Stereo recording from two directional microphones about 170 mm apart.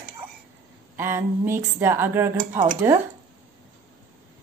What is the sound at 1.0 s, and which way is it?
A woman's voice, 15° right (ahead or behind).